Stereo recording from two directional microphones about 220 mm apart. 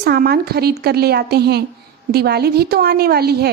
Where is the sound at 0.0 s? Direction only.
45° right (ahead or behind).